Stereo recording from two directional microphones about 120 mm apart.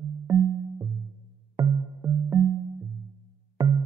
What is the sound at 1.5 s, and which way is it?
Music, 20° right (ahead or behind).